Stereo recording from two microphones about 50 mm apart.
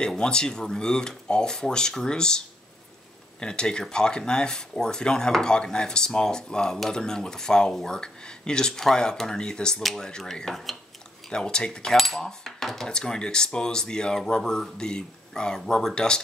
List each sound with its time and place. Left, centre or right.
0.0 s speech: centre
11.2 s speech: centre
12.0 s cutlery: centre
12.3 s speech: centre